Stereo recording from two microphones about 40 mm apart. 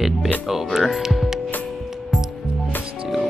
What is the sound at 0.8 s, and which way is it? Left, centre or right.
Music, centre.